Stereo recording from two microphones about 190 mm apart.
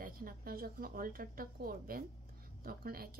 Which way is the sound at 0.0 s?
50° right (ahead or behind).